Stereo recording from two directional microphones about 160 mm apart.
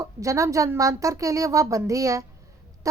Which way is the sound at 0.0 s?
20° right (ahead or behind).